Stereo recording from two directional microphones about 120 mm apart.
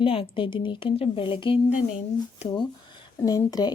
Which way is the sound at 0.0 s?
50° left (ahead or behind).